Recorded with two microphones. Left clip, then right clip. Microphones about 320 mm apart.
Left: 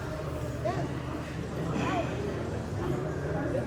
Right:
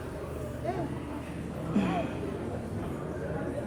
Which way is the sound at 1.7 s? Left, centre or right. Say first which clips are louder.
Even; centre.